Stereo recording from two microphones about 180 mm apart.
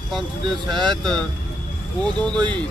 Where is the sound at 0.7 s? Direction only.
25° right (ahead or behind).